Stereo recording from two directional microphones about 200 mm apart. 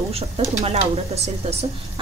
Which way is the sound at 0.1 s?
30° right (ahead or behind).